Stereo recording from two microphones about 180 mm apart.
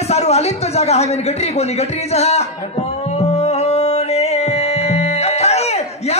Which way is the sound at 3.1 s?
35° left (ahead or behind).